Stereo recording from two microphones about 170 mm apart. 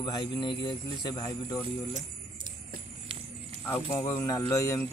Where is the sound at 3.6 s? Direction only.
15° left (ahead or behind).